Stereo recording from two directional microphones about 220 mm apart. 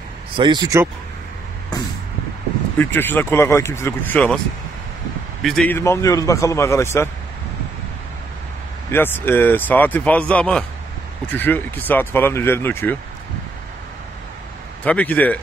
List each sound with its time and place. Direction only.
0.4 s speech: 20° right (ahead or behind)
2.8 s speech: 10° left (ahead or behind)
5.4 s speech: centre (ahead or behind)
8.9 s speech: 10° left (ahead or behind)
14.9 s speech: 5° left (ahead or behind)